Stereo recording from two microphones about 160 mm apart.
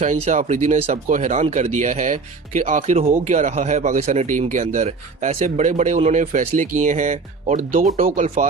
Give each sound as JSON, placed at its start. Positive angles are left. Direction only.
{"t": 0.0, "sound": "speech", "side_deg": -50}